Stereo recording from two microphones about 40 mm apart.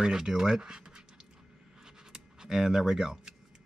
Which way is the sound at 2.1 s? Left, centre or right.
Centre.